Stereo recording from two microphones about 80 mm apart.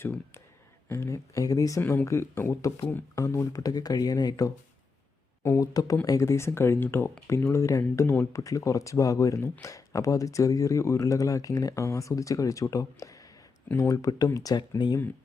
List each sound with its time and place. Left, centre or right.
0.9 s speech: left
5.5 s speech: left